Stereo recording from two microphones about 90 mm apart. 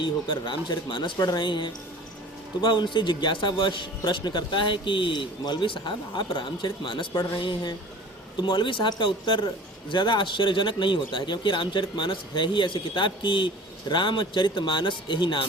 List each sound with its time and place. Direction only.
0.0 s speech: 60° left (ahead or behind)
1.2 s speech: 55° left (ahead or behind)
7.3 s speech: 55° left (ahead or behind)